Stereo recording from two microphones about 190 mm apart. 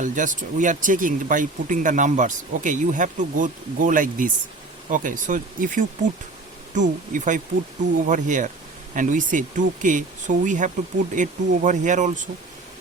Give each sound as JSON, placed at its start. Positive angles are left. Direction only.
{"t": 0.0, "sound": "speech", "side_deg": -40}